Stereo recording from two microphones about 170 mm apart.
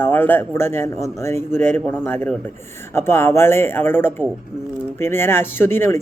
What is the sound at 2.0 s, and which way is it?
Speech, 10° left (ahead or behind).